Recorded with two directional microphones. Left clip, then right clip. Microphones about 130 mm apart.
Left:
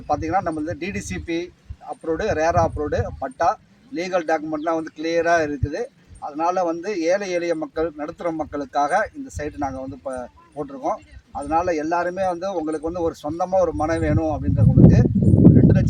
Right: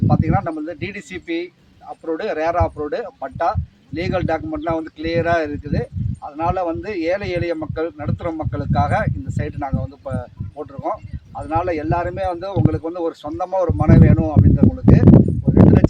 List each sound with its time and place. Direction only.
0.1 s speech: 20° left (ahead or behind)